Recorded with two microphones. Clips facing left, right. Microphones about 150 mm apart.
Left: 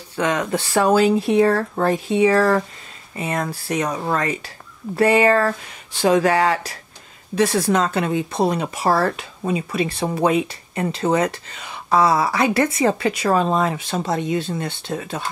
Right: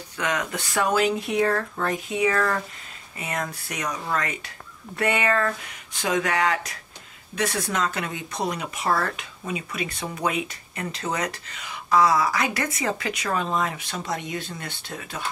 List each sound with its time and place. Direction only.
0.1 s speech: 30° left (ahead or behind)